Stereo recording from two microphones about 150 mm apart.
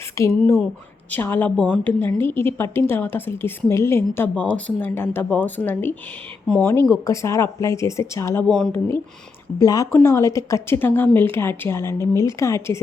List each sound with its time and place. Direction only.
0.2 s a woman's voice: 20° left (ahead or behind)
7.0 s speech: 20° left (ahead or behind)
8.4 s speech: 5° left (ahead or behind)
9.6 s a woman's voice: 25° left (ahead or behind)